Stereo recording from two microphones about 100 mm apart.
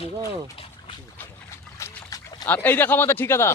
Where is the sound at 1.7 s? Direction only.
30° left (ahead or behind).